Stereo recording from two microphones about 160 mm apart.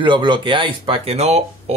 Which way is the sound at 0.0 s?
30° right (ahead or behind).